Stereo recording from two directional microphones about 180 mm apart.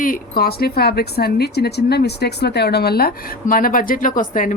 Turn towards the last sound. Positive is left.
turn(degrees=45)  # may be behind; listen again after turning